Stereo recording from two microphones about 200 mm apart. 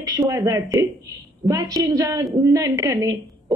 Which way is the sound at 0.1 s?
15° right (ahead or behind).